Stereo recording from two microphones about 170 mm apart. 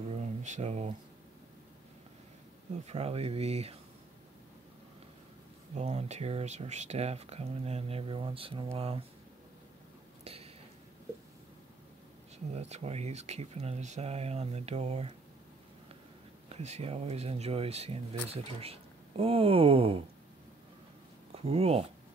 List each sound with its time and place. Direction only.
0.1 s speech: 40° right (ahead or behind)
2.7 s speech: 40° right (ahead or behind)
5.8 s speech: 40° right (ahead or behind)
10.2 s a sound: 35° right (ahead or behind)
12.5 s speech: 40° right (ahead or behind)
16.4 s speech: 40° right (ahead or behind)
21.4 s speech: 35° right (ahead or behind)